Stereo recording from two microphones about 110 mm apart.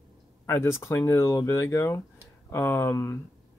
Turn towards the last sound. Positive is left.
turn(degrees=20)  # may be behind; listen again after turning